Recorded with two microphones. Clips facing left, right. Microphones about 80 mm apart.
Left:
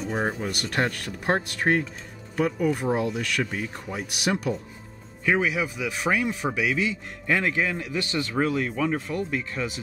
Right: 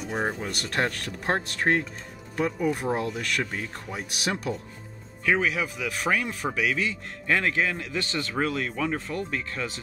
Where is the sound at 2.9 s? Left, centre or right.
Centre.